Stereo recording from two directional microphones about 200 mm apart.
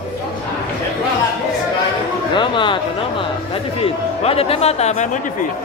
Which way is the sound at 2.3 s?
25° left (ahead or behind).